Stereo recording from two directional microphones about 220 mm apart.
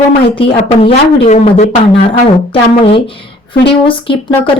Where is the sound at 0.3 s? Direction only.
25° left (ahead or behind).